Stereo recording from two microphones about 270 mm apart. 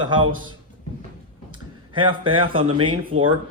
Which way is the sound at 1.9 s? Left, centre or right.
Centre.